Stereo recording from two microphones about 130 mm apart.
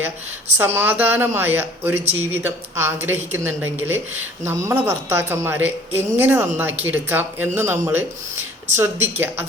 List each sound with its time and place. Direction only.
0.6 s a woman's voice: 15° right (ahead or behind)